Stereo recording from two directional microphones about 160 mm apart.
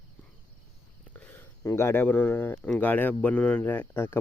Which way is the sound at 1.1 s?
10° left (ahead or behind).